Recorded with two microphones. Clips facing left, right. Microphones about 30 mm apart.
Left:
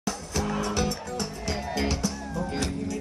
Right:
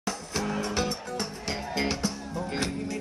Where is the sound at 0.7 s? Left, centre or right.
Right.